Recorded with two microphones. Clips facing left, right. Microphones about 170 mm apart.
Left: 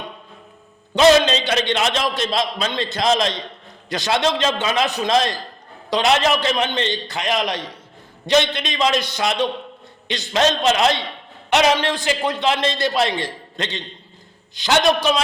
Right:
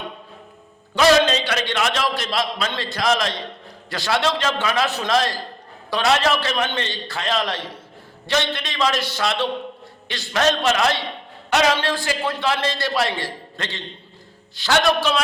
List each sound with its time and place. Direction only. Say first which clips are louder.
0.9 s a man's voice: left 2 dB; 20° left (ahead or behind)